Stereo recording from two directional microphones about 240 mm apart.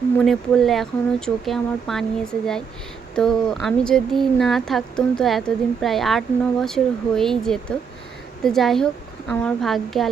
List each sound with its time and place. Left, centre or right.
0.2 s speech: centre